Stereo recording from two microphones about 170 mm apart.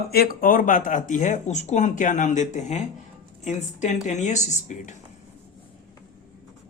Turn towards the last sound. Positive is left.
turn(degrees=45)  # may be behind; listen again after turning